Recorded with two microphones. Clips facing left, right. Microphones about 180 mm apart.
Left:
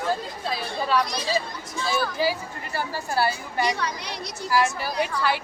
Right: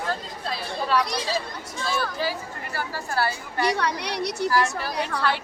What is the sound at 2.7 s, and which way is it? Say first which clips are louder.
A woman's voice: left 2 dB; 15° left (ahead or behind).